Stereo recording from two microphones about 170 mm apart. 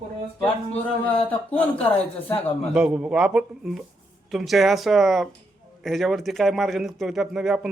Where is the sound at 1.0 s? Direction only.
10° left (ahead or behind).